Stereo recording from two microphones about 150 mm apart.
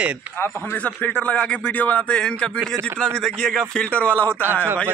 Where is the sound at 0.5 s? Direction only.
10° left (ahead or behind).